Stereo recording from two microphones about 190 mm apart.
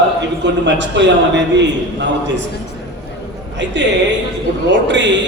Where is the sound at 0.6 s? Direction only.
70° right (ahead or behind).